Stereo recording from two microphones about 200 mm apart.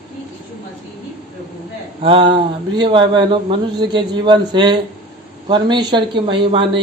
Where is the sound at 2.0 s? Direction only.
25° right (ahead or behind).